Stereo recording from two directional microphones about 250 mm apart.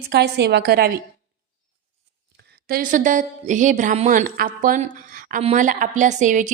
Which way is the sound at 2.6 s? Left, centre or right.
Right.